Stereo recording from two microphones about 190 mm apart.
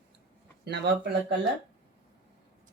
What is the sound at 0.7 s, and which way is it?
Speech, 65° right (ahead or behind).